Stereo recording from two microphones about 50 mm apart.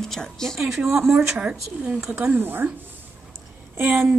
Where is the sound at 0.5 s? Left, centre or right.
Centre.